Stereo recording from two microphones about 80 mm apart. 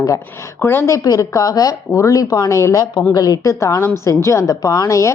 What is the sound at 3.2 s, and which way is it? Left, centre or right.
A woman's voice, left.